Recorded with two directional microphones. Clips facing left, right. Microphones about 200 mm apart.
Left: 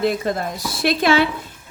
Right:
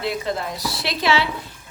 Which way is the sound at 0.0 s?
45° left (ahead or behind).